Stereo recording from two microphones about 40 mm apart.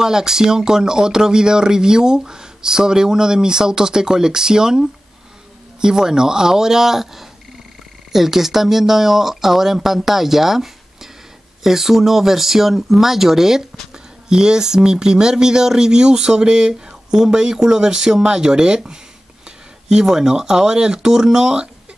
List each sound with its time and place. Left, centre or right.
0.0 s speech: centre